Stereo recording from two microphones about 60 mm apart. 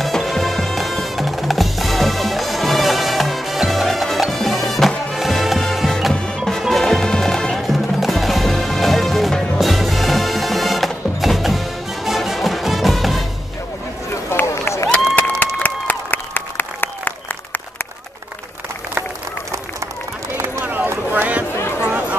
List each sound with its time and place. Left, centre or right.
0.0 s music: centre
14.9 s applause: left
20.3 s run: right
20.6 s run: right
21.1 s a sound: right